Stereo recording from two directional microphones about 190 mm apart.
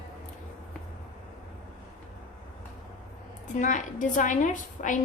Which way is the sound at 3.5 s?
40° left (ahead or behind).